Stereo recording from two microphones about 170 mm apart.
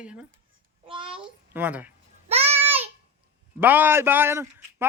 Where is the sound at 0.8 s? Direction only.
30° right (ahead or behind).